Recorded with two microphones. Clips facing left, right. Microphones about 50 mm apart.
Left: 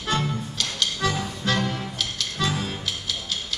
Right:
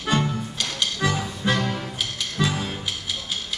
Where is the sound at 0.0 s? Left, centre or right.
Centre.